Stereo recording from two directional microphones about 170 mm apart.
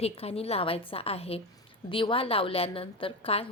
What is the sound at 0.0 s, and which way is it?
A woman's voice, 35° left (ahead or behind).